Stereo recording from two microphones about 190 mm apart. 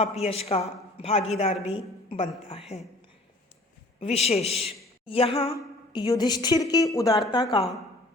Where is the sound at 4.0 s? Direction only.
35° left (ahead or behind).